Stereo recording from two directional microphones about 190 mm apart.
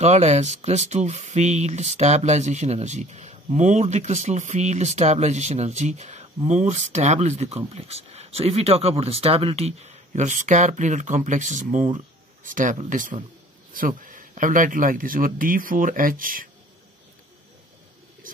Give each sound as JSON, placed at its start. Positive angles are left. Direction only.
{"t": 0.0, "sound": "speech", "side_deg": -35}
{"t": 18.3, "sound": "mouse", "side_deg": -45}